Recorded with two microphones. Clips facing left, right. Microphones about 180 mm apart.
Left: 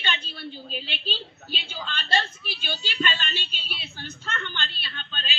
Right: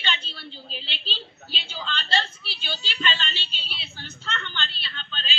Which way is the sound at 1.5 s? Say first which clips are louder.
Left 1 dB; 15° left (ahead or behind).